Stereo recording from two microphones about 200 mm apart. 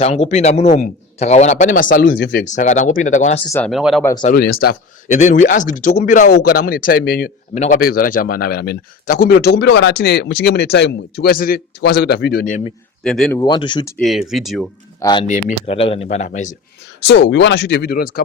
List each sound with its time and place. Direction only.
0.0 s a man's voice: 30° left (ahead or behind)
3.7 s speech: centre (ahead or behind)
4.4 s speech: 50° left (ahead or behind)
7.5 s a man's voice: 35° left (ahead or behind)
7.8 s speech: 45° left (ahead or behind)
13.0 s speech: centre (ahead or behind)
13.4 s speech: 25° left (ahead or behind)
13.9 s speech: centre (ahead or behind)
15.0 s speech: 25° left (ahead or behind)
15.3 s a man's voice: 35° left (ahead or behind)
17.1 s speech: 65° left (ahead or behind); by 18.2 s 50° left (ahead or behind)